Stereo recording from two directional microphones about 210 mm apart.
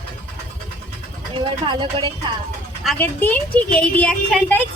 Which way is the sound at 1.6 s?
25° right (ahead or behind).